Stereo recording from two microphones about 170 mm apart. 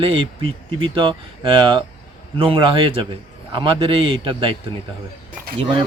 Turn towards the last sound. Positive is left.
turn(degrees=-30)  # may be behind; listen again after turning